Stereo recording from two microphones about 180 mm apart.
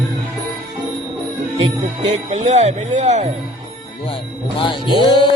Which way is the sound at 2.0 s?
40° right (ahead or behind).